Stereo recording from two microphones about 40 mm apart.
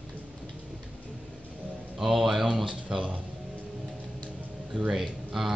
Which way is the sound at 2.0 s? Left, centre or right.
Centre.